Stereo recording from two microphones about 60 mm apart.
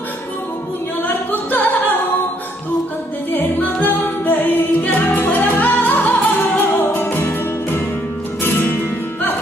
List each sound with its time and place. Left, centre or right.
1.0 s music: left
3.3 s music: left